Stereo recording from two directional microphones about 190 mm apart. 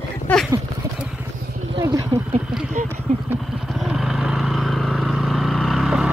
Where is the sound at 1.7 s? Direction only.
15° right (ahead or behind).